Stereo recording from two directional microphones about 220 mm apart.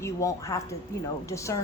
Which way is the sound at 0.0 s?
15° left (ahead or behind).